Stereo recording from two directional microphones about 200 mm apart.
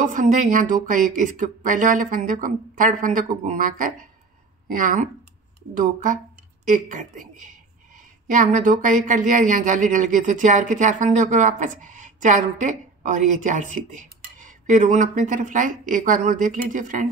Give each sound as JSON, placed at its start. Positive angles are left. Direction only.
{"t": 0.0, "sound": "a woman's voice", "side_deg": -40}
{"t": 6.6, "sound": "a woman's voice", "side_deg": -40}